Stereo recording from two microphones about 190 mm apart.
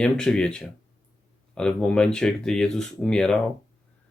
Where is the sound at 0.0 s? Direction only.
5° left (ahead or behind).